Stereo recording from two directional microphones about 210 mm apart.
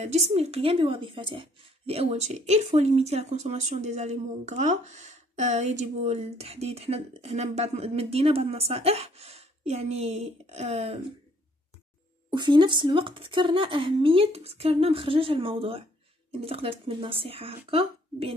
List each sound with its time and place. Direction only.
0.0 s a woman's voice: 30° right (ahead or behind)
12.3 s speech: 20° right (ahead or behind)